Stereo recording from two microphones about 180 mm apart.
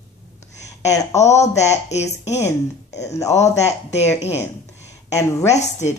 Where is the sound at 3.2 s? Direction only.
40° left (ahead or behind).